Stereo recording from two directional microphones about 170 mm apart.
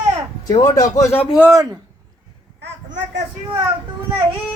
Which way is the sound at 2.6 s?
90° right.